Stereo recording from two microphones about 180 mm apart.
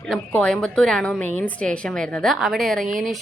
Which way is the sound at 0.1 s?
5° left (ahead or behind).